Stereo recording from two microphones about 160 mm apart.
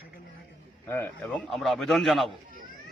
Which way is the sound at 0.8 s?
15° left (ahead or behind).